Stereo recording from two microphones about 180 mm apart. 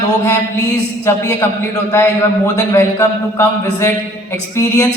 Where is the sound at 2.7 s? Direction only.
15° left (ahead or behind).